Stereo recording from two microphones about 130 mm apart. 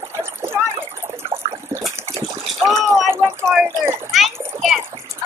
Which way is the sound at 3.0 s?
20° right (ahead or behind).